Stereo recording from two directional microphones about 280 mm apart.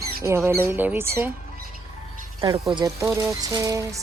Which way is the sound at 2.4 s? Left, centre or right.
Centre.